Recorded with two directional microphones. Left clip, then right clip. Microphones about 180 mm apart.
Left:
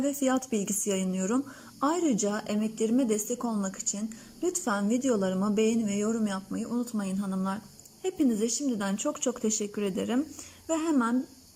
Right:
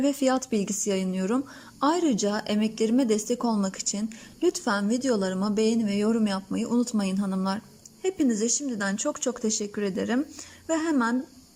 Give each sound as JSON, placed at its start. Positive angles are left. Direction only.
{"t": 0.0, "sound": "a woman's voice", "side_deg": 0}